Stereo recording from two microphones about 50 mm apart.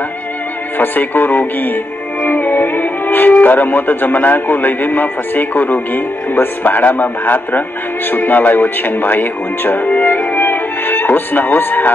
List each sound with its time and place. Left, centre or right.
0.7 s speech: left
9.8 s music: left